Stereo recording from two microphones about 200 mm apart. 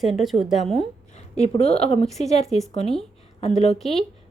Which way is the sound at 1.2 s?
30° left (ahead or behind).